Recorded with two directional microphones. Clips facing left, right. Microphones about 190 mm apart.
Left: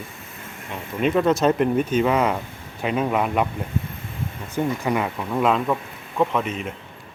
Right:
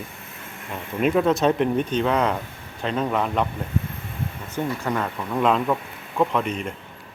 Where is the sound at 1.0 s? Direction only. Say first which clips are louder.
Left 1 dB; centre (ahead or behind).